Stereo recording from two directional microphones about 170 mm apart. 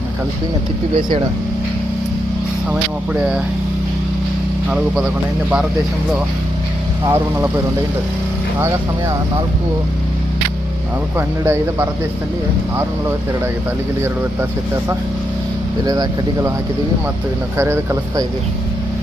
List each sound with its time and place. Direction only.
3.1 s speech: 5° right (ahead or behind)
7.1 s speech: 15° right (ahead or behind)
11.4 s speech: 10° right (ahead or behind)
15.8 s speech: 25° right (ahead or behind)
17.6 s speech: 15° right (ahead or behind)